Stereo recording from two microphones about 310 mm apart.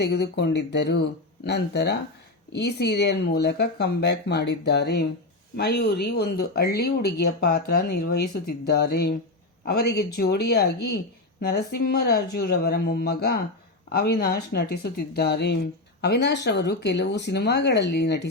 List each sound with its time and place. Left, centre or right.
0.0 s speech: left